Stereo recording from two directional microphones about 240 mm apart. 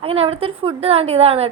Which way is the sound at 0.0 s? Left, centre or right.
Right.